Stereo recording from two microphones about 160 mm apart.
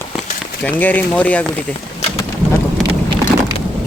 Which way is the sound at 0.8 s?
10° left (ahead or behind).